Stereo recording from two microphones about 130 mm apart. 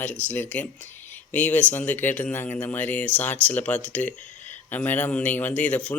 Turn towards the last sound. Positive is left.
turn(degrees=10)  # may be behind; listen again after turning